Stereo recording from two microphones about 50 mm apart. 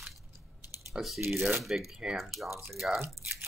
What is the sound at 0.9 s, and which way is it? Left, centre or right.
Speech, centre.